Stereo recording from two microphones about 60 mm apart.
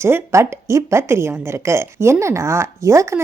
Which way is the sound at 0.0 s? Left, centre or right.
Right.